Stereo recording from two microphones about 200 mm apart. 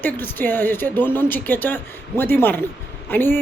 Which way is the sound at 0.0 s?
10° left (ahead or behind).